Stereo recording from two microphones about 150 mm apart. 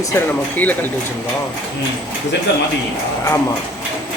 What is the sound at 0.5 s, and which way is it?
Speech, 10° left (ahead or behind).